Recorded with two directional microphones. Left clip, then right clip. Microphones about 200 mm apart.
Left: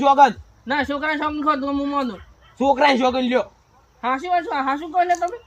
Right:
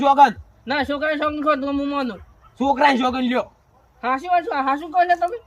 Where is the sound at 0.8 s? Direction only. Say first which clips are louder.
Right 2 dB; 20° right (ahead or behind).